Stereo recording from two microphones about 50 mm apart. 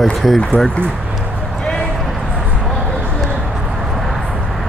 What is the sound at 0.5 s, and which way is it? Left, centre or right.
Speech, right.